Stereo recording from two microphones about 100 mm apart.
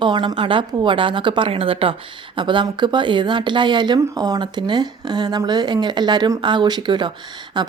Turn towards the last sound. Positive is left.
turn(degrees=-45)  # may be behind; listen again after turning